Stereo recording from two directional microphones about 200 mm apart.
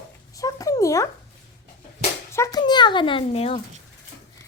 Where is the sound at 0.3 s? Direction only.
15° left (ahead or behind).